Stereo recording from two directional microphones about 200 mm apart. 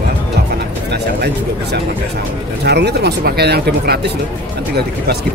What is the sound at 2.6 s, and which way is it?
Speech, 55° right (ahead or behind).